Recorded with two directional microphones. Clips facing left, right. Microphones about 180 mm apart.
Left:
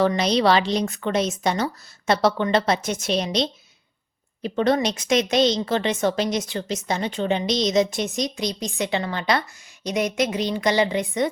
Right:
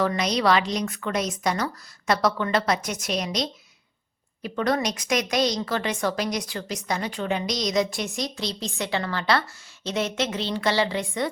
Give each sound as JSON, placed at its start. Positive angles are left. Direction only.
{"t": 0.0, "sound": "a woman's voice", "side_deg": 30}